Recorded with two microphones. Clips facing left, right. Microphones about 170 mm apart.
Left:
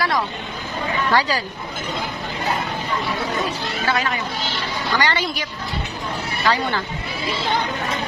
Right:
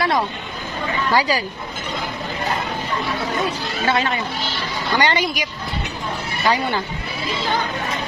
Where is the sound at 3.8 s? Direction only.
25° right (ahead or behind).